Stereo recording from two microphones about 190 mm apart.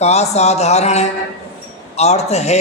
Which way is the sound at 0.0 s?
35° left (ahead or behind).